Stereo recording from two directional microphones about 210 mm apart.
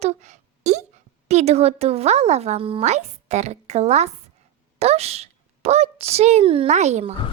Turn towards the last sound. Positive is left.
turn(degrees=-30)  # may be behind; listen again after turning